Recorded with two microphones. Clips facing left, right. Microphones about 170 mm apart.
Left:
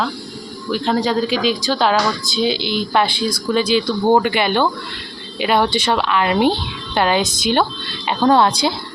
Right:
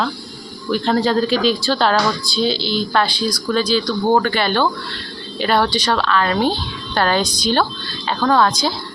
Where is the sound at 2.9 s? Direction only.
20° left (ahead or behind).